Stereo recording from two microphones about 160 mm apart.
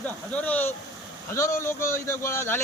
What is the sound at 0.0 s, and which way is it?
Speech, 10° left (ahead or behind).